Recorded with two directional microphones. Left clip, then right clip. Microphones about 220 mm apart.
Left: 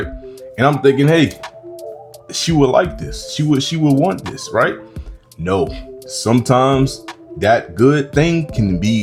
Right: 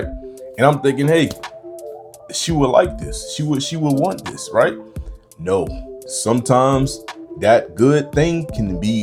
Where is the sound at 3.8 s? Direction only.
Centre (ahead or behind).